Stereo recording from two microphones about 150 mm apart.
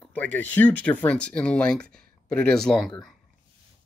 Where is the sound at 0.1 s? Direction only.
10° left (ahead or behind).